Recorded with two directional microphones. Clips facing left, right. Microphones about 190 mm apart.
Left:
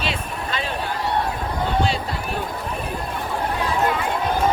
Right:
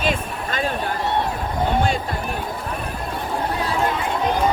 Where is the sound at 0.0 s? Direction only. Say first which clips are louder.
Right 3 dB; 50° right (ahead or behind).